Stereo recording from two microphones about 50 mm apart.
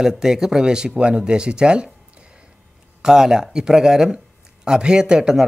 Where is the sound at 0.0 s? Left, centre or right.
Centre.